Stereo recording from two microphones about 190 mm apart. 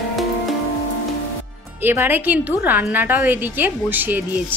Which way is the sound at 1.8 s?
10° right (ahead or behind).